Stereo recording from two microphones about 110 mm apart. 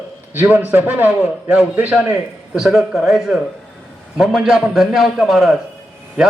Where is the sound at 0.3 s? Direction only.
20° right (ahead or behind).